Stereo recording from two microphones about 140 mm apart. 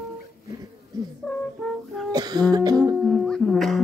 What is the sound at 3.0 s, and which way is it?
Music, 5° left (ahead or behind).